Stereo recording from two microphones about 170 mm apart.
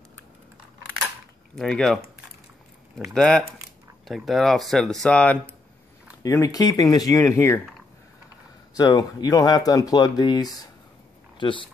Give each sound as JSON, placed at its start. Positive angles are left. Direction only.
{"t": 1.5, "sound": "speech", "side_deg": 0}
{"t": 3.2, "sound": "speech", "side_deg": 5}
{"t": 6.2, "sound": "speech", "side_deg": 20}
{"t": 8.7, "sound": "speech", "side_deg": 20}